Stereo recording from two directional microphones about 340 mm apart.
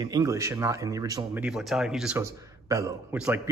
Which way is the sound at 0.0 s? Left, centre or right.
Centre.